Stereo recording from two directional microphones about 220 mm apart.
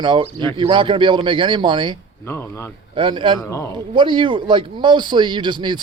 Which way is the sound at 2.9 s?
20° right (ahead or behind).